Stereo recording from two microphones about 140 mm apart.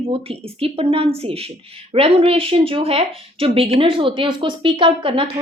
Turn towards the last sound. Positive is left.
turn(degrees=-40)  # may be behind; listen again after turning